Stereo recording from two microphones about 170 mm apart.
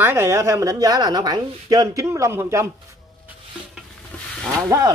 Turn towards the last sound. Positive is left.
turn(degrees=-20)  # may be behind; listen again after turning